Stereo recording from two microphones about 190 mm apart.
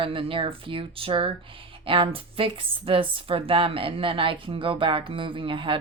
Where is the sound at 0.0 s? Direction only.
30° right (ahead or behind).